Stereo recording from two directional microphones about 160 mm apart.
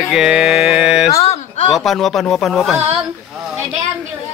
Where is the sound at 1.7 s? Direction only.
Centre (ahead or behind).